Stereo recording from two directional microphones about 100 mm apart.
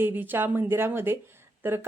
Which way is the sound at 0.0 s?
20° right (ahead or behind).